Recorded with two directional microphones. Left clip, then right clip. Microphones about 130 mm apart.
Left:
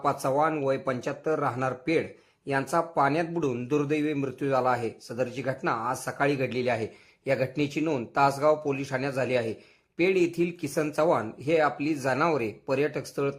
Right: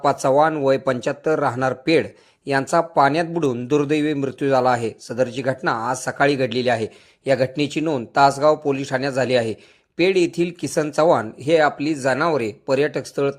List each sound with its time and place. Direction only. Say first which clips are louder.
0.0 s a man's voice: right 9 dB; 30° right (ahead or behind)